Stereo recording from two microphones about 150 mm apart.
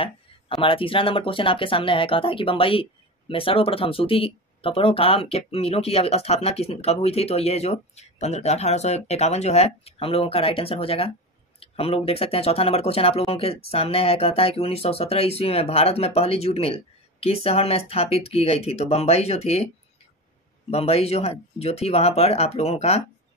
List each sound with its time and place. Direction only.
0.0 s speech: 35° left (ahead or behind)
20.7 s speech: 40° left (ahead or behind)